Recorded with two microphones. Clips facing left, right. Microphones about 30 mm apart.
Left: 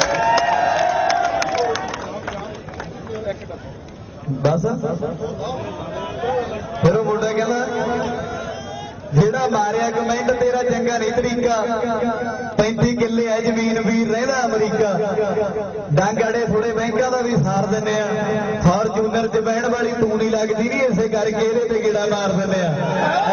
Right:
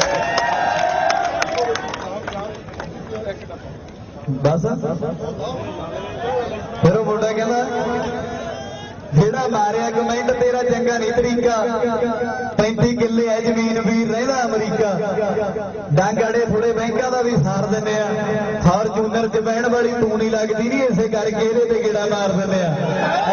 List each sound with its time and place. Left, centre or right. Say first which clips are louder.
0.0 s crowd: left 2 dB; centre
4.4 s a man's voice: even; centre
6.8 s a sound: right 1 dB; centre
7.3 s a man's voice: right 1 dB; centre